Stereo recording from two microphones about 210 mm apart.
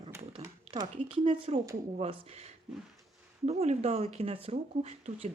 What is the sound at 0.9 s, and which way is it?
Speech, 25° right (ahead or behind).